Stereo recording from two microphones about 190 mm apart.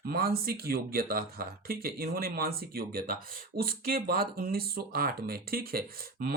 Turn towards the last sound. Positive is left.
turn(degrees=-50)  # may be behind; listen again after turning